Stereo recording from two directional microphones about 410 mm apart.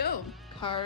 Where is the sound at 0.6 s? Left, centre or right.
Centre.